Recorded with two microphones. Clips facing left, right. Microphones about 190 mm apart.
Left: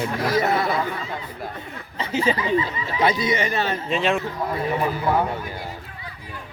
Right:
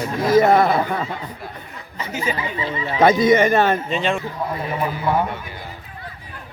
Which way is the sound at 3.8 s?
Centre (ahead or behind).